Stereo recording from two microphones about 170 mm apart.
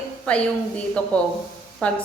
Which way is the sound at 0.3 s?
5° left (ahead or behind).